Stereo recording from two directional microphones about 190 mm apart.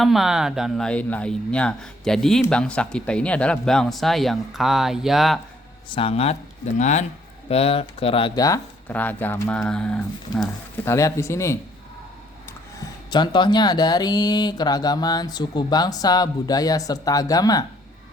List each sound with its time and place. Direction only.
0.0 s speech: centre (ahead or behind)
5.9 s speech: 30° left (ahead or behind); by 10.5 s 5° left (ahead or behind)
10.8 s speech: 15° left (ahead or behind)
13.1 s speech: 25° left (ahead or behind)